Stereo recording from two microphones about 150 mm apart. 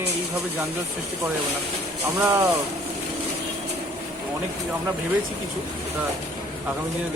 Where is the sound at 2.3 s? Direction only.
20° right (ahead or behind).